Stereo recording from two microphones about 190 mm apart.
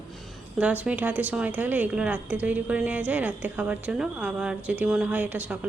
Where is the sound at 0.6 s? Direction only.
5° right (ahead or behind).